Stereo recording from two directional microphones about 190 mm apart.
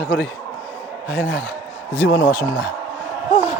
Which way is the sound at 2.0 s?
70° left (ahead or behind).